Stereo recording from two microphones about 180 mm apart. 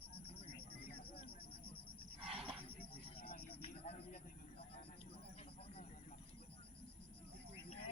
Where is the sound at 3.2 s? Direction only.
55° left (ahead or behind).